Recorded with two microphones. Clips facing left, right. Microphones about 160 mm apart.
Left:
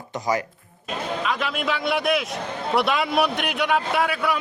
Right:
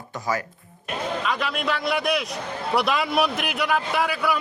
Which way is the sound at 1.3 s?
Centre (ahead or behind).